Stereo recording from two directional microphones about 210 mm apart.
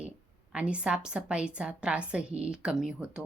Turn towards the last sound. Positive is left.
turn(degrees=-5)  # may be behind; listen again after turning